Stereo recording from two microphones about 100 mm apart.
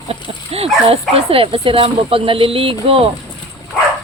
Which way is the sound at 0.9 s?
70° right (ahead or behind).